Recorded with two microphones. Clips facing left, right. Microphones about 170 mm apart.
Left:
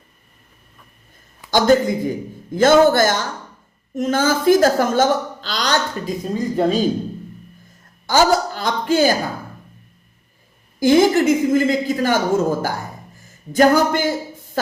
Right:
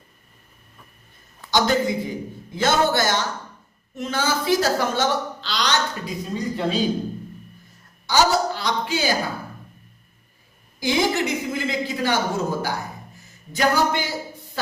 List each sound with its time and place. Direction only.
1.5 s a woman's voice: 45° left (ahead or behind)
8.0 s a sound: 50° left (ahead or behind)
10.8 s a woman's voice: 50° left (ahead or behind)